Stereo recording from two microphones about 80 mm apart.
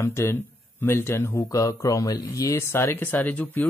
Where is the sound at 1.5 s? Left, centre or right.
Left.